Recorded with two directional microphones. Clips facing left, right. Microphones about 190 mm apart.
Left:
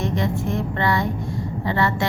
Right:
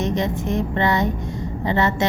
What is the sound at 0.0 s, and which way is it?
A woman's voice, 20° right (ahead or behind).